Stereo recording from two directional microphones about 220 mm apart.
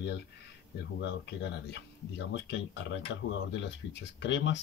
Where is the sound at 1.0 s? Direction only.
55° left (ahead or behind).